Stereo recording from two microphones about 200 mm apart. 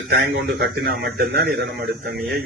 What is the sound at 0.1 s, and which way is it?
Speech, 55° right (ahead or behind).